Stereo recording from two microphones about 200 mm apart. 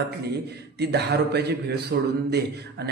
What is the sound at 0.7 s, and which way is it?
A man's voice, 55° right (ahead or behind).